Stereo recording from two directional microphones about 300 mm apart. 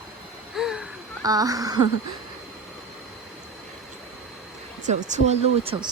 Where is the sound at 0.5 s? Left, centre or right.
Centre.